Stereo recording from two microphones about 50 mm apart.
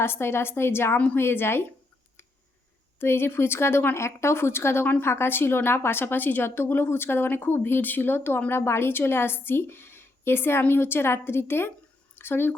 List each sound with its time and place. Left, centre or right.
0.0 s a woman's voice: left
3.0 s a woman's voice: left